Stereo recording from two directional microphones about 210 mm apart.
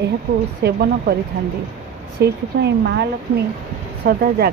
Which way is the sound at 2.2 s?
50° right (ahead or behind).